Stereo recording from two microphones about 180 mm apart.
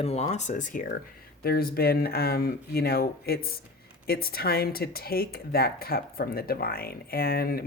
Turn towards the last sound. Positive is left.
turn(degrees=55)  # may be behind; listen again after turning